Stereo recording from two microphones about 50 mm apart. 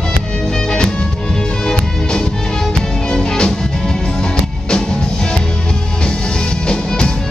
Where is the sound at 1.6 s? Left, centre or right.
Centre.